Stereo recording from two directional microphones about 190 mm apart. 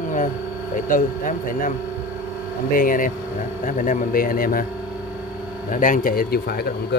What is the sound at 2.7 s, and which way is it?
Speech, 45° left (ahead or behind).